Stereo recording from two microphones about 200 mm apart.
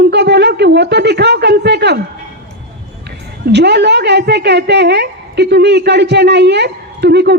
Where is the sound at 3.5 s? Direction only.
60° right (ahead or behind).